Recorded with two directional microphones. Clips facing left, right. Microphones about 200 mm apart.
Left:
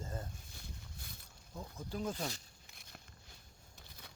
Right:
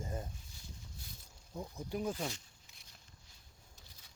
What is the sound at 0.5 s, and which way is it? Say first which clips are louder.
Boat: left 1 dB; 60° left (ahead or behind).